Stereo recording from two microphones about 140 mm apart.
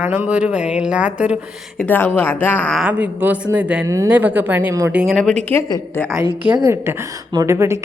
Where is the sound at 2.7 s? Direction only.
5° right (ahead or behind).